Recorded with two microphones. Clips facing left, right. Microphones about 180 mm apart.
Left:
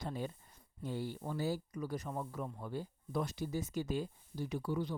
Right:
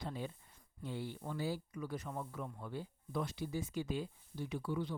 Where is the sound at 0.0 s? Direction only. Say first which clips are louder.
Left 2 dB; 45° left (ahead or behind).